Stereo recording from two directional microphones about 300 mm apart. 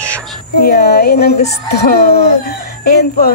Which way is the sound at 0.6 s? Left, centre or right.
Left.